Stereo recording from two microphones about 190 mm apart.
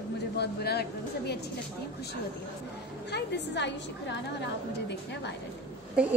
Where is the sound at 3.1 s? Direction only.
65° left (ahead or behind).